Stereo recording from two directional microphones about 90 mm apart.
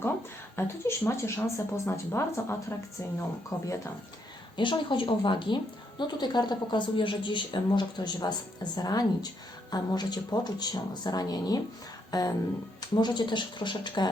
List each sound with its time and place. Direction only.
0.5 s speech: 30° left (ahead or behind)
4.5 s a woman's voice: 65° left (ahead or behind); by 12.3 s 45° left (ahead or behind)
12.9 s a woman's voice: 55° left (ahead or behind)